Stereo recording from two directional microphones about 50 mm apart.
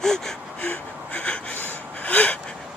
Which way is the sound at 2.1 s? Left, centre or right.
Left.